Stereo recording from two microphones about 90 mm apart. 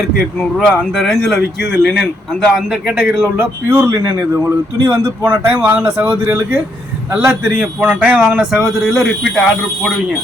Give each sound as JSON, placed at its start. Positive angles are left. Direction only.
{"t": 0.3, "sound": "a man's voice", "side_deg": 10}
{"t": 2.9, "sound": "speech", "side_deg": -20}
{"t": 3.9, "sound": "a man's voice", "side_deg": -35}
{"t": 4.4, "sound": "speech", "side_deg": -25}
{"t": 7.1, "sound": "a man's voice", "side_deg": -15}